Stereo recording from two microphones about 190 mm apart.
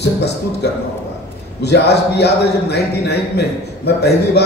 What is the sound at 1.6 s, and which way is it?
Speech, 60° left (ahead or behind).